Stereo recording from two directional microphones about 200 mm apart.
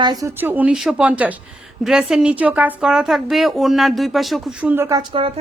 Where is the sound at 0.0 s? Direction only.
20° right (ahead or behind).